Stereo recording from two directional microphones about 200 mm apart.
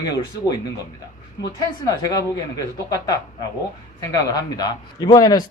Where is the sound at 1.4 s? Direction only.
20° left (ahead or behind).